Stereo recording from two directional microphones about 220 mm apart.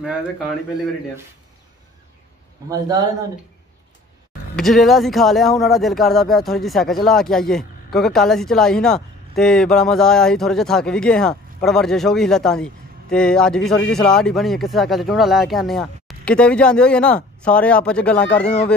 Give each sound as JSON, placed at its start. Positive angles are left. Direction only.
{"t": 2.7, "sound": "speech", "side_deg": -15}
{"t": 4.6, "sound": "speech", "side_deg": 0}